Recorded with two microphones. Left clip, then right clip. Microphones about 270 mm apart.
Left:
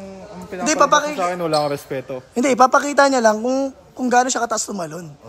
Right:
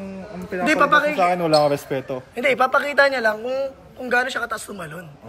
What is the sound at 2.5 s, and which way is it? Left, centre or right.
A man's voice, centre.